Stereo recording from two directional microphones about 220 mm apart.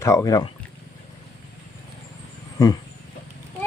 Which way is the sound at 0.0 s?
15° left (ahead or behind).